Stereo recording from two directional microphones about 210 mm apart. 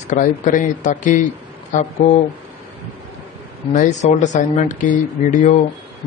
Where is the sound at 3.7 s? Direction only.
35° left (ahead or behind).